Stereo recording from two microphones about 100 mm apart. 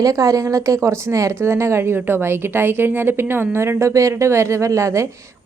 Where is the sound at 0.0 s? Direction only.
35° right (ahead or behind).